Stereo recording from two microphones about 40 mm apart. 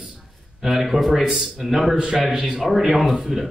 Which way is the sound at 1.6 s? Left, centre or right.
Centre.